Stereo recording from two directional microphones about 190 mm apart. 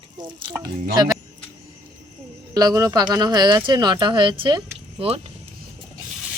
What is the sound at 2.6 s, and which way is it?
Speech, 20° right (ahead or behind).